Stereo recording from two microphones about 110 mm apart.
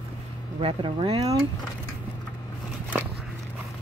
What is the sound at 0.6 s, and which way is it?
Speech, 55° right (ahead or behind).